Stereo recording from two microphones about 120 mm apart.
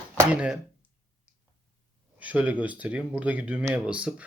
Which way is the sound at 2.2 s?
10° right (ahead or behind).